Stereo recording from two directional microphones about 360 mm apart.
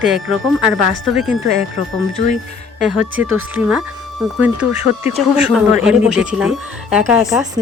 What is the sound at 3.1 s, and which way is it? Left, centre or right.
Speech, right.